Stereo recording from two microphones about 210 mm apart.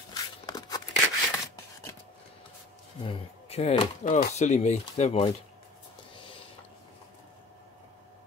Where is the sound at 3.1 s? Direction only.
30° left (ahead or behind).